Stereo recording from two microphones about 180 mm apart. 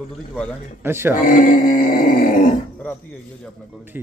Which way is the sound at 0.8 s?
15° right (ahead or behind).